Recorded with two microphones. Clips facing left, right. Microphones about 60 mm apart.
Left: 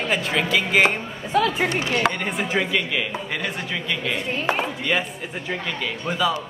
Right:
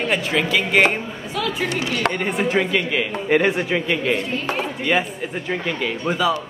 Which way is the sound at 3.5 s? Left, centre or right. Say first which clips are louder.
Right 6 dB; right.